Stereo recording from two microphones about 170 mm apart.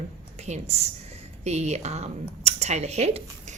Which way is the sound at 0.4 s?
40° right (ahead or behind).